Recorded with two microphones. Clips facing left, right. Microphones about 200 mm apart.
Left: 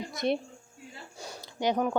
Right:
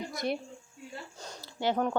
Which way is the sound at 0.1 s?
20° left (ahead or behind).